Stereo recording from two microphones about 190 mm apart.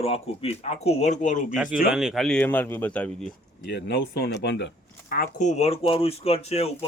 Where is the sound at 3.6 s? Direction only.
60° left (ahead or behind).